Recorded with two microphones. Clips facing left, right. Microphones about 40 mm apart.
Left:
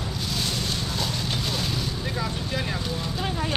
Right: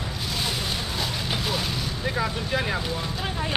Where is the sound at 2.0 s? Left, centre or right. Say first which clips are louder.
Right 3 dB; centre.